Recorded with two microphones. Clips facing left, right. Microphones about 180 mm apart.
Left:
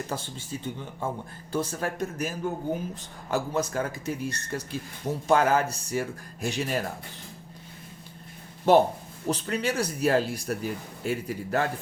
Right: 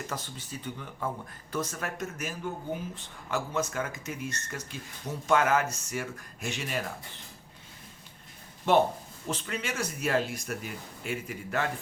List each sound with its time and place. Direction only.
0.1 s speech: 30° left (ahead or behind)
8.7 s speech: 40° left (ahead or behind)